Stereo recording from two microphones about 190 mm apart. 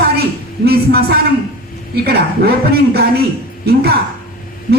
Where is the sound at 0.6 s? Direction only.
55° right (ahead or behind).